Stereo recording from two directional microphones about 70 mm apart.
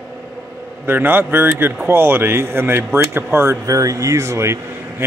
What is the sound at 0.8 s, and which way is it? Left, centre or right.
Speech, right.